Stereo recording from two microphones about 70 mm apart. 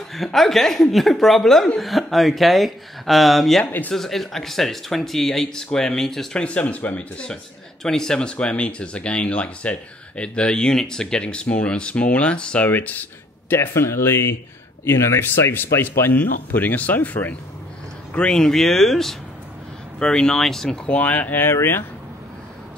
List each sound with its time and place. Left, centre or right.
0.1 s speech: centre
12.6 s speech: left
13.5 s speech: left
18.1 s speech: centre; by 21.8 s left